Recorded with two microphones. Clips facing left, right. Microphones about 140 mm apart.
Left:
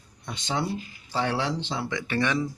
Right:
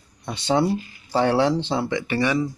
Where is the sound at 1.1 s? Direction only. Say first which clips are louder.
Right 8 dB; 40° right (ahead or behind).